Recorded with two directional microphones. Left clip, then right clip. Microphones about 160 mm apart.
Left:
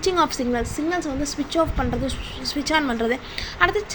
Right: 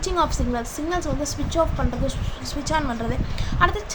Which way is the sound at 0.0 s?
15° left (ahead or behind).